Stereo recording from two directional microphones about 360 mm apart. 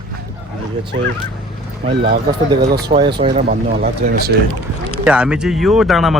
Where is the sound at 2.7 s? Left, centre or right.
Centre.